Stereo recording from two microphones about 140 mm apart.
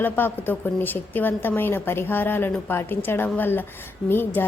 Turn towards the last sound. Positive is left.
turn(degrees=15)  # may be behind; listen again after turning